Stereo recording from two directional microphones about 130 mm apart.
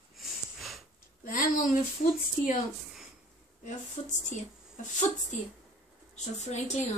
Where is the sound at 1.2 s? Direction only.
90° left.